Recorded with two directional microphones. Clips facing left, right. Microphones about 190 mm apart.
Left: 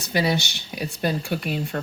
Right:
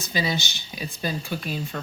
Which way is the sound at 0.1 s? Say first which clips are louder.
Left 5 dB; 65° left (ahead or behind).